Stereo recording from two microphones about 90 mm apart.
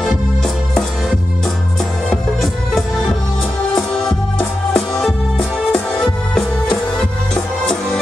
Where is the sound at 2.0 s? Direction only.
5° left (ahead or behind).